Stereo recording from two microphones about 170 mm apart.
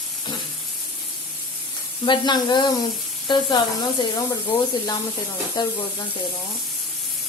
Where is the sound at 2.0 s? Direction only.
25° left (ahead or behind).